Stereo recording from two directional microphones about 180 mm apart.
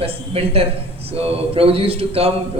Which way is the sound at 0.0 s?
30° right (ahead or behind).